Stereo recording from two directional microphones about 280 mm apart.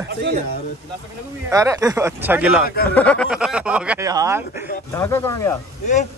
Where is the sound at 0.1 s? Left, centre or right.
Right.